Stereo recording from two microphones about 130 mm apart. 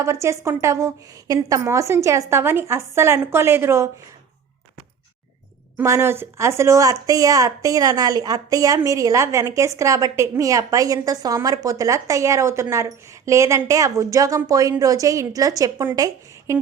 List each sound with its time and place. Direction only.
0.0 s a woman's voice: 20° right (ahead or behind)
5.7 s a woman's voice: 20° right (ahead or behind)